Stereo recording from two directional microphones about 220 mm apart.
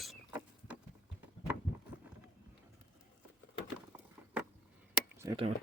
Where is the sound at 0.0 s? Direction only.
5° right (ahead or behind).